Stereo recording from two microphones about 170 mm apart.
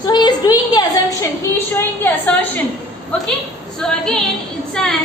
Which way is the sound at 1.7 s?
10° left (ahead or behind).